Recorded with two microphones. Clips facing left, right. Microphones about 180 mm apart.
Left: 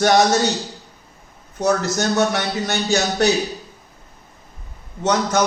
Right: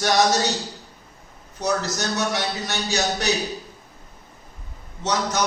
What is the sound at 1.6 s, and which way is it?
A man's voice, 55° left (ahead or behind).